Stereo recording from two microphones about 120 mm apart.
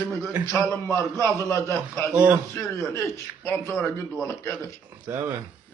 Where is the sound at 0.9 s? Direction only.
25° left (ahead or behind).